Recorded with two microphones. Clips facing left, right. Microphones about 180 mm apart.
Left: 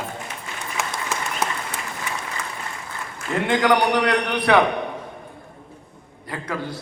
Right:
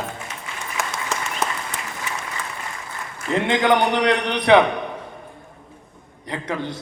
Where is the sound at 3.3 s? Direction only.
25° right (ahead or behind).